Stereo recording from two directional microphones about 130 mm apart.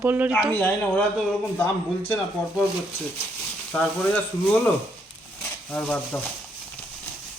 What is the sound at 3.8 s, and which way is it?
Speech, 10° left (ahead or behind).